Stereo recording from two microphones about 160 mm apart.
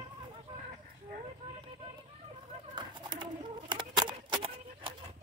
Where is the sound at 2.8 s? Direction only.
30° right (ahead or behind).